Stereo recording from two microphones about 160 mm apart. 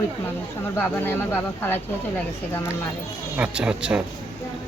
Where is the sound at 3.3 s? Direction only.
5° right (ahead or behind).